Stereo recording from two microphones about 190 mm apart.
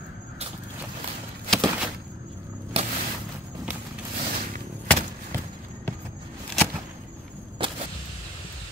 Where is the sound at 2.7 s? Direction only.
30° right (ahead or behind).